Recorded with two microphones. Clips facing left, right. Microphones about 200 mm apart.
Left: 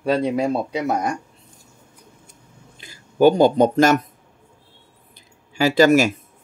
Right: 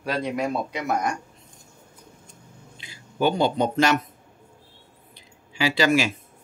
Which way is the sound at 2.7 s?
45° left (ahead or behind).